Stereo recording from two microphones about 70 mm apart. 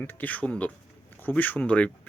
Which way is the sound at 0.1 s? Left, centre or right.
Left.